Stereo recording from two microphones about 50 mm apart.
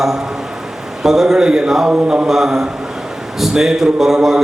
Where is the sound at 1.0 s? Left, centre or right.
Centre.